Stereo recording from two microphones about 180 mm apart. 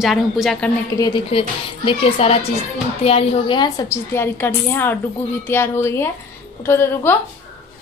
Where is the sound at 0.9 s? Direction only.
25° left (ahead or behind).